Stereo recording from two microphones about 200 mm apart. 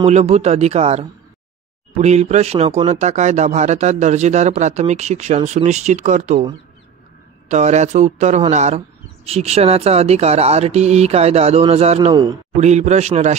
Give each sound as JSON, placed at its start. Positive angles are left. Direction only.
{"t": 0.0, "sound": "speech", "side_deg": -35}
{"t": 7.4, "sound": "speech", "side_deg": -35}
{"t": 12.1, "sound": "speech", "side_deg": -20}
{"t": 12.5, "sound": "speech", "side_deg": -35}